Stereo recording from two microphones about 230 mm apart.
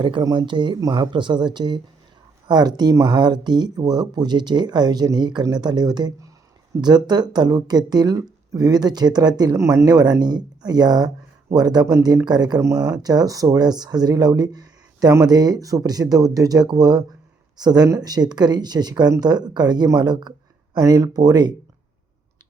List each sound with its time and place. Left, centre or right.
0.0 s speech: centre